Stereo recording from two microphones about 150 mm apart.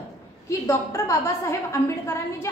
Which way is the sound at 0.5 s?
20° left (ahead or behind).